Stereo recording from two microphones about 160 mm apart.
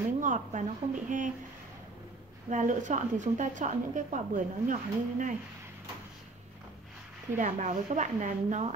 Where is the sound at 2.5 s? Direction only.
50° right (ahead or behind).